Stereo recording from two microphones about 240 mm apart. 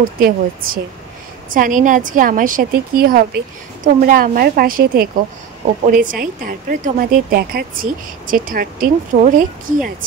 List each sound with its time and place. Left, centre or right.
0.2 s a woman's voice: right